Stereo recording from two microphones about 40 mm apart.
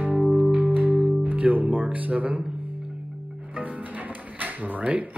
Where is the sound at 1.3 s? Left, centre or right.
Right.